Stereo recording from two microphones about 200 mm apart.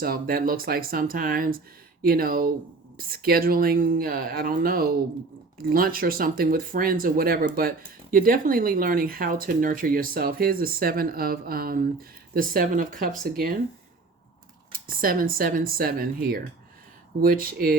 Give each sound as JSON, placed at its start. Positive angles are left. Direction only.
{"t": 0.0, "sound": "speech", "side_deg": -50}
{"t": 14.7, "sound": "speech", "side_deg": -45}